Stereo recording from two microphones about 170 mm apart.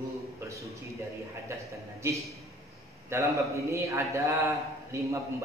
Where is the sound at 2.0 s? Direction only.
15° right (ahead or behind).